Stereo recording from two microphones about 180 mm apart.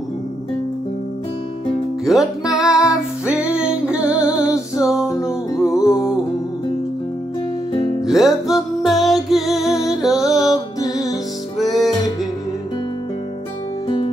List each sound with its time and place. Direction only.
2.0 s music: centre (ahead or behind)
5.1 s music: 15° left (ahead or behind)
8.0 s music: centre (ahead or behind)
10.5 s music: 20° left (ahead or behind)
13.8 s music: 25° left (ahead or behind)